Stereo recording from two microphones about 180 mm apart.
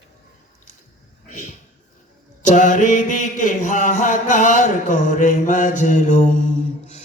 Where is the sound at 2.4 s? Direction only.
45° left (ahead or behind).